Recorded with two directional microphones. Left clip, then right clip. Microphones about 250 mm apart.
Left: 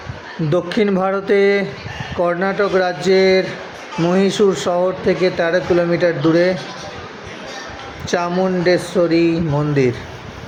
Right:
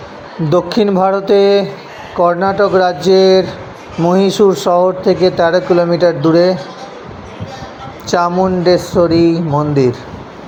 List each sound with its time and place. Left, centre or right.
0.5 s speech: centre
8.1 s speech: centre